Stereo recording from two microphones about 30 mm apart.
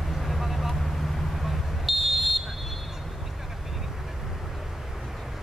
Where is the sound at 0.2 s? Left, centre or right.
Centre.